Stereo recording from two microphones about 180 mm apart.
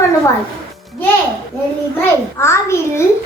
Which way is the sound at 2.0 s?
15° left (ahead or behind).